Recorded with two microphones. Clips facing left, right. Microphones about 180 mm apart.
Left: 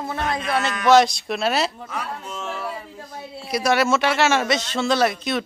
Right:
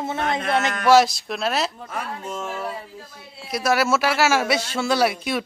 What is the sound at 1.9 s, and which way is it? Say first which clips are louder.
Speech: right 1 dB; 50° right (ahead or behind).